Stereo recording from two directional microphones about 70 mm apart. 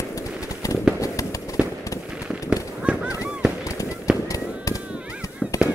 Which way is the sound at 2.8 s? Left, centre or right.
Centre.